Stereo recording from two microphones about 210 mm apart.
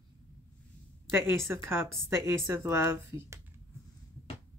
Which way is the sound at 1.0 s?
10° right (ahead or behind).